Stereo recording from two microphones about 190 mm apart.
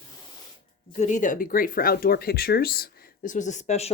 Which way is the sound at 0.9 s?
40° left (ahead or behind).